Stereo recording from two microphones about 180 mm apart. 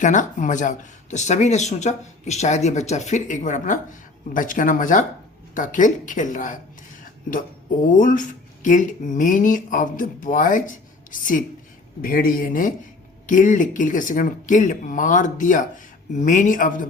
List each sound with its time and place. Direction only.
0.0 s speech: 45° left (ahead or behind)